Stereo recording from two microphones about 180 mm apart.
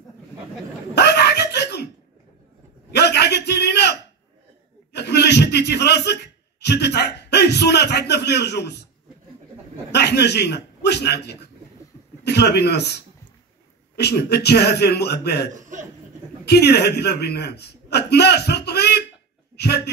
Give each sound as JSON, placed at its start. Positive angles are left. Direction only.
{"t": 0.9, "sound": "a sound", "side_deg": 70}
{"t": 2.9, "sound": "a sound", "side_deg": 65}
{"t": 6.6, "sound": "a man's voice", "side_deg": 70}
{"t": 9.8, "sound": "a man's voice", "side_deg": 70}
{"t": 15.5, "sound": "speech", "side_deg": -45}
{"t": 16.4, "sound": "a man's voice", "side_deg": 65}